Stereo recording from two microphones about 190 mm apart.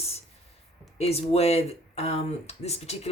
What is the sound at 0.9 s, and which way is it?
Speech, 30° left (ahead or behind).